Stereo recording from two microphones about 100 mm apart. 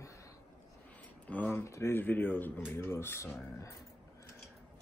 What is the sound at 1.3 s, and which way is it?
Speech, 20° left (ahead or behind).